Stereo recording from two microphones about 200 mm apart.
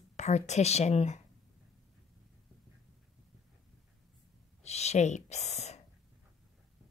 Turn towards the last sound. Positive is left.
turn(degrees=35)  # may be behind; listen again after turning